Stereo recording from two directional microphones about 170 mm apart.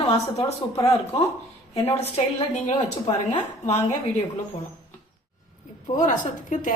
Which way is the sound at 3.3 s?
40° left (ahead or behind).